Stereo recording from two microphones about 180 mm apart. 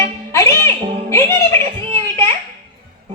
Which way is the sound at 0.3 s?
15° left (ahead or behind).